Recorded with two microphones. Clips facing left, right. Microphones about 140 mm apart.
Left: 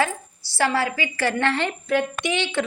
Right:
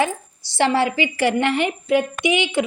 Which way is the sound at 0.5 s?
25° right (ahead or behind).